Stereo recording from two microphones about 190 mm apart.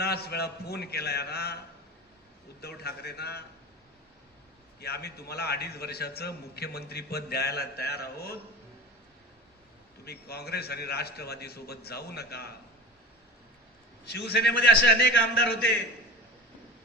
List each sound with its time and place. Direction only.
0.0 s a man's voice: 55° left (ahead or behind)
2.6 s a man's voice: 55° left (ahead or behind)
4.8 s a man's voice: 55° left (ahead or behind)
10.0 s a man's voice: 55° left (ahead or behind)
14.1 s a man's voice: 60° left (ahead or behind)